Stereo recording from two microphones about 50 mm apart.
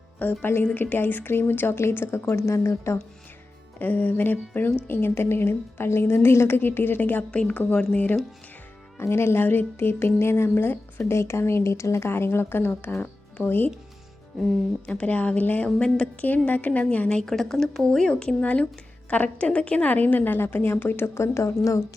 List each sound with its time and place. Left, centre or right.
0.2 s a woman's voice: left
3.8 s a woman's voice: left
4.9 s a woman's voice: left
7.3 s a woman's voice: left
9.0 s a woman's voice: left
11.1 s speech: left
14.8 s a woman's voice: left
17.2 s speech: centre
18.0 s speech: centre
18.3 s a woman's voice: left
21.2 s speech: left